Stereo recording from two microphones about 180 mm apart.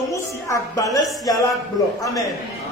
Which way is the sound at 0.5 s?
20° left (ahead or behind).